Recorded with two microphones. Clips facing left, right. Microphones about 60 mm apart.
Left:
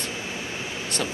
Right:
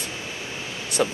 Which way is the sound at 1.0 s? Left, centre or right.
Centre.